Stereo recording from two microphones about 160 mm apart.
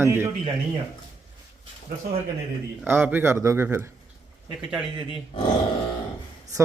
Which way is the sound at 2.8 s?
10° right (ahead or behind).